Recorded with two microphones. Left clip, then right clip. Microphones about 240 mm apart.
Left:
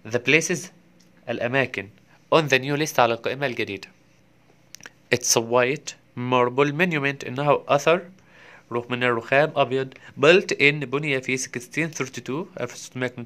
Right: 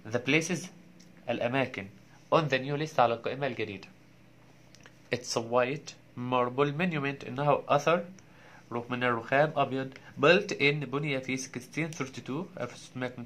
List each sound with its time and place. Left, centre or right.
0.0 s speech: left